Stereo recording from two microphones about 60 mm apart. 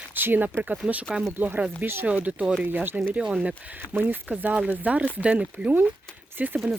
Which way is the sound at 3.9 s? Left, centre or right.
Right.